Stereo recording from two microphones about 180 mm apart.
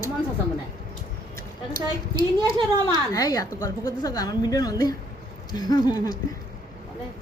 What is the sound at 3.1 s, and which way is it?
A woman's voice, 20° left (ahead or behind).